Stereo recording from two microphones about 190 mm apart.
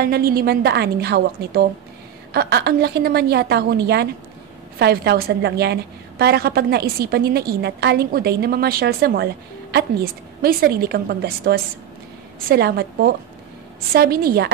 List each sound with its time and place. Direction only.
0.0 s a woman's voice: 55° right (ahead or behind)